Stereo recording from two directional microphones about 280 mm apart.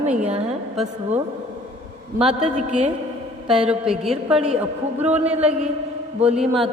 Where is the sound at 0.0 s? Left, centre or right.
Right.